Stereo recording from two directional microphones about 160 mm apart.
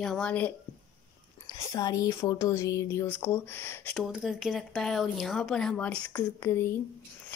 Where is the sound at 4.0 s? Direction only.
Centre (ahead or behind).